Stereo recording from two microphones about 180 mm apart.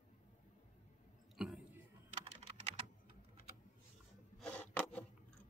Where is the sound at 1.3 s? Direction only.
Centre (ahead or behind).